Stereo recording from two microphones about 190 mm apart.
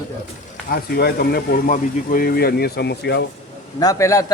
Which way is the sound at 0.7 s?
55° left (ahead or behind).